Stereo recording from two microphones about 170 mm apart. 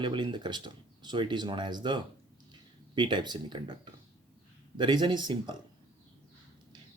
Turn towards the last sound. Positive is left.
turn(degrees=-25)  # may be behind; listen again after turning